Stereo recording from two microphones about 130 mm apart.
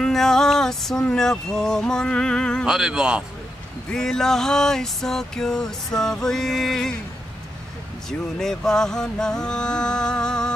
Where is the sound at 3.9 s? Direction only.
5° left (ahead or behind).